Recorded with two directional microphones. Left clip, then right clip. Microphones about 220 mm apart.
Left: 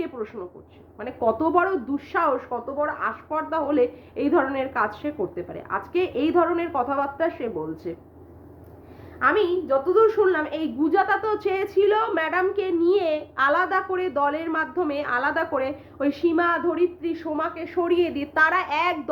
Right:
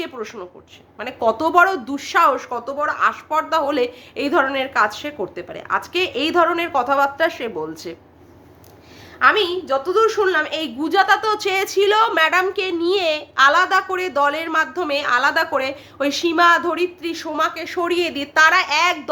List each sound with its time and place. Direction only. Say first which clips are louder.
0.0 s a woman's voice: right 2 dB; 15° right (ahead or behind)
9.1 s a woman's voice: right 5 dB; 5° right (ahead or behind)